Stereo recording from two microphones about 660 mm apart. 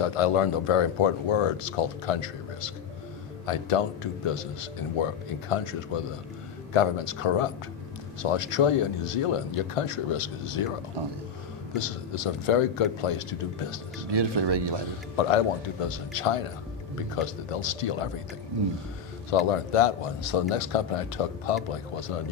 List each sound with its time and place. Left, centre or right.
0.0 s speech: left
5.5 s speech: left
11.7 s speech: left
14.1 s speech: right
15.1 s speech: left
19.3 s speech: left